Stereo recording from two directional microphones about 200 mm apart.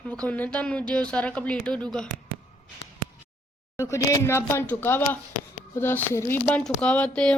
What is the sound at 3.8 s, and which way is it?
Speech, 15° left (ahead or behind).